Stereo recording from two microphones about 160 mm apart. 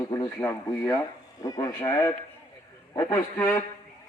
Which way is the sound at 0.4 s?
15° left (ahead or behind).